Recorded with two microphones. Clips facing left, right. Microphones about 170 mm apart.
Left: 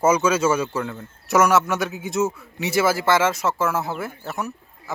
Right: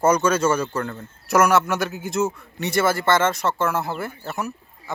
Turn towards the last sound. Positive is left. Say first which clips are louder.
# even
turn(degrees=0)  # may be behind; listen again after turning